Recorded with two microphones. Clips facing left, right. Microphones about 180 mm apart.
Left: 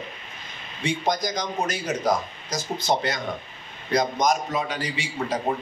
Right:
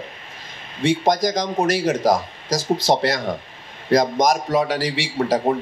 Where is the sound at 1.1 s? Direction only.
90° right.